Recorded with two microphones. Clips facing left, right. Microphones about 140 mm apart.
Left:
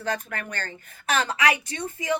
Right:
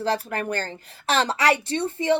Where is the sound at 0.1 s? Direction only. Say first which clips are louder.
Right 3 dB; 30° right (ahead or behind).